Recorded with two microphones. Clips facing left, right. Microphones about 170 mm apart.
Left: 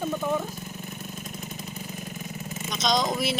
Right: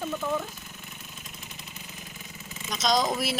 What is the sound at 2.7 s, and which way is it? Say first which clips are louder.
Speech: even; centre (ahead or behind).